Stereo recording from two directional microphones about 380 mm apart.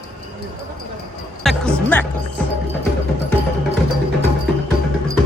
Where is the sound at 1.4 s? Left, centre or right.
Centre.